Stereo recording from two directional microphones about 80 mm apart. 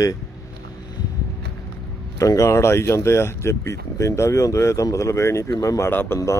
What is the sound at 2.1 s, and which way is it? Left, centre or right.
Speech, left.